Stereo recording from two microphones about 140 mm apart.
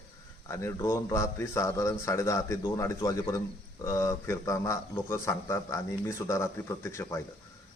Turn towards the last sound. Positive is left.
turn(degrees=20)  # may be behind; listen again after turning